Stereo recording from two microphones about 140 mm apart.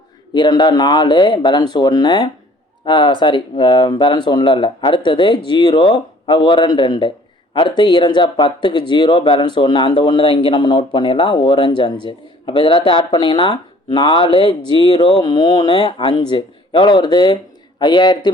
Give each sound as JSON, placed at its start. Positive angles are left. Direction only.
{"t": 0.3, "sound": "speech", "side_deg": 35}
{"t": 14.9, "sound": "speech", "side_deg": 45}
{"t": 15.2, "sound": "speech", "side_deg": 30}